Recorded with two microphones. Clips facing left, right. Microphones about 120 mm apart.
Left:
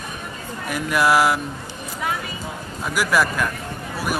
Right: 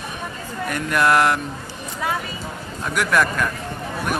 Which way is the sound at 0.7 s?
5° left (ahead or behind).